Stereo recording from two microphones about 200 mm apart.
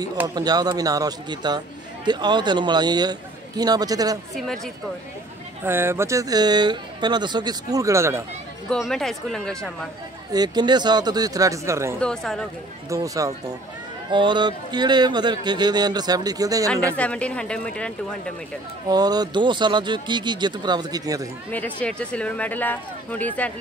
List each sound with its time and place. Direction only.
0.3 s a man's voice: 20° right (ahead or behind)
5.6 s speech: 10° right (ahead or behind)
8.6 s speech: centre (ahead or behind)
10.3 s a man's voice: 20° right (ahead or behind)
12.0 s speech: 5° left (ahead or behind)
12.9 s a man's voice: 15° right (ahead or behind)
16.9 s speech: 5° left (ahead or behind)
18.9 s a man's voice: 20° right (ahead or behind)
21.5 s speech: 5° left (ahead or behind)